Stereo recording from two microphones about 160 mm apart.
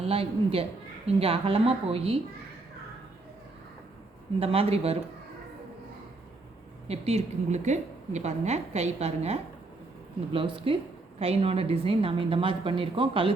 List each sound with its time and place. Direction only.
0.0 s a woman's voice: 35° right (ahead or behind)
4.4 s a woman's voice: 35° right (ahead or behind)
6.8 s a woman's voice: 40° right (ahead or behind)